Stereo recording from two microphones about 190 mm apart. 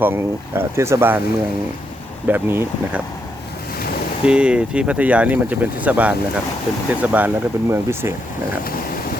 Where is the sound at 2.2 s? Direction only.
10° right (ahead or behind).